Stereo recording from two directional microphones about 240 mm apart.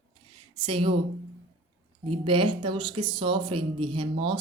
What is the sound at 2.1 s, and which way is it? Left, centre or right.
Speech, right.